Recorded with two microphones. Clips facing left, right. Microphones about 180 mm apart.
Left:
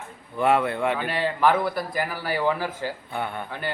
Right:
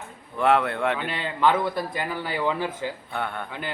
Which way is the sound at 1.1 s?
20° right (ahead or behind).